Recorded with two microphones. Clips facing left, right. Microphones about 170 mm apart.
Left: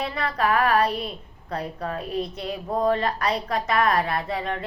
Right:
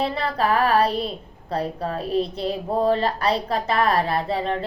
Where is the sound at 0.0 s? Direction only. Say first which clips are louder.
Right 2 dB; 30° right (ahead or behind).